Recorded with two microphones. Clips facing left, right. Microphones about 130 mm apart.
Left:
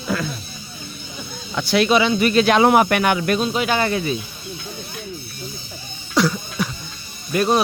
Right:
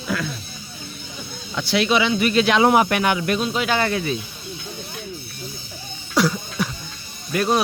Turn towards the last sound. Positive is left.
turn(degrees=25)  # may be behind; listen again after turning